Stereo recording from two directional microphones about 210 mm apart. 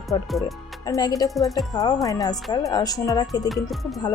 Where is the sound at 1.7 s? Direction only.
20° left (ahead or behind).